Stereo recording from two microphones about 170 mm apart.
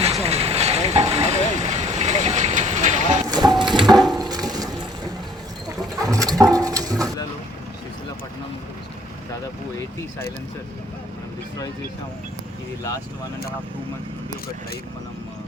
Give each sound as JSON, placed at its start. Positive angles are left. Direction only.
{"t": 0.0, "sound": "vehicle", "side_deg": -40}
{"t": 3.2, "sound": "mechanisms", "side_deg": -25}
{"t": 3.9, "sound": "wood", "side_deg": 0}
{"t": 4.2, "sound": "a sound", "side_deg": -20}